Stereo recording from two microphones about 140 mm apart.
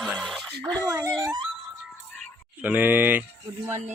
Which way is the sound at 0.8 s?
20° right (ahead or behind).